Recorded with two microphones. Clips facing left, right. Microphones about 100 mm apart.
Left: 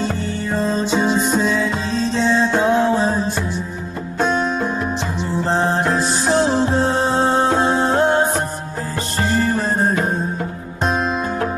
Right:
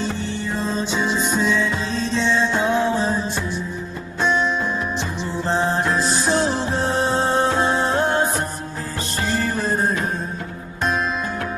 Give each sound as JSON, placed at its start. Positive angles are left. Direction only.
{"t": 0.5, "sound": "music", "side_deg": 40}